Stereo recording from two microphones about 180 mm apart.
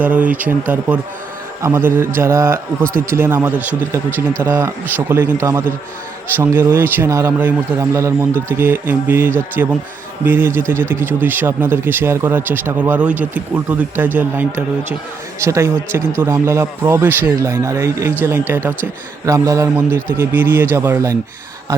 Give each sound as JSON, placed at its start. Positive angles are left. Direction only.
{"t": 0.0, "sound": "speech", "side_deg": -10}
{"t": 1.6, "sound": "speech", "side_deg": -15}